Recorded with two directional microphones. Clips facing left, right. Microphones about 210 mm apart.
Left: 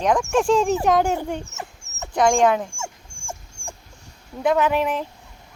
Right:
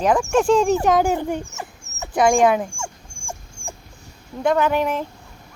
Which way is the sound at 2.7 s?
5° left (ahead or behind).